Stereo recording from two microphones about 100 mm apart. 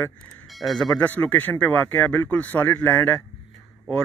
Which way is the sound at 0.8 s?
10° left (ahead or behind).